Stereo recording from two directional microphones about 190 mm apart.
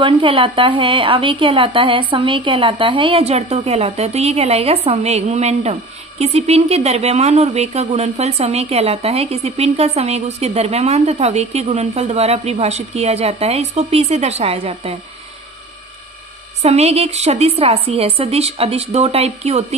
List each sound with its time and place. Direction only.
0.0 s speech: 25° right (ahead or behind)
16.6 s speech: 35° right (ahead or behind)